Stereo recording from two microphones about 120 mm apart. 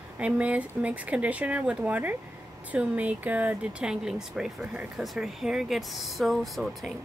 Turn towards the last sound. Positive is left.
turn(degrees=0)  # may be behind; listen again after turning